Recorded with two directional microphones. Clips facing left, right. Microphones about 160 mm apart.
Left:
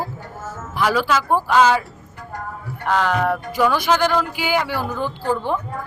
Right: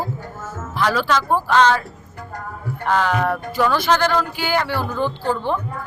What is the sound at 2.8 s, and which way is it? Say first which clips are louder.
Speech: even; centre (ahead or behind).